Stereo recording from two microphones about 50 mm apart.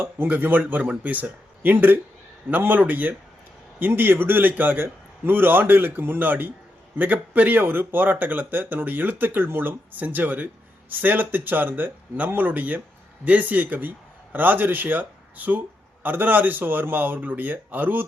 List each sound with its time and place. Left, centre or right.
0.0 s speech: right